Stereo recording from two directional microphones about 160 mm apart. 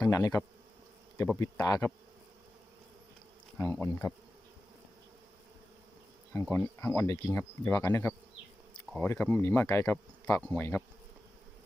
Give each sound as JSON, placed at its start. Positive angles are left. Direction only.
{"t": 0.0, "sound": "speech", "side_deg": 20}
{"t": 3.6, "sound": "speech", "side_deg": 15}
{"t": 6.3, "sound": "speech", "side_deg": 15}